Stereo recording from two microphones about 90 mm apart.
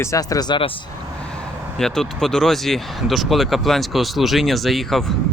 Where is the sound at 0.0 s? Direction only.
40° left (ahead or behind).